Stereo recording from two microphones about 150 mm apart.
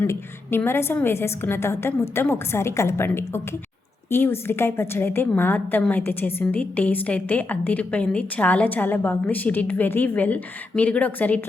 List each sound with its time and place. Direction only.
0.0 s a woman's voice: 15° left (ahead or behind)